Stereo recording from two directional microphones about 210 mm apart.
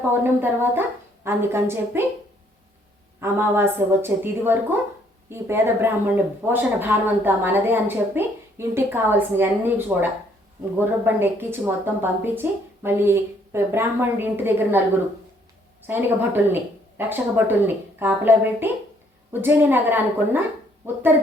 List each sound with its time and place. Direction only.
0.1 s speech: 10° right (ahead or behind)
3.2 s speech: 10° right (ahead or behind)
15.9 s speech: 10° right (ahead or behind)